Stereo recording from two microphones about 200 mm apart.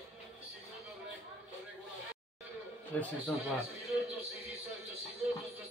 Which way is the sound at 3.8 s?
Centre (ahead or behind).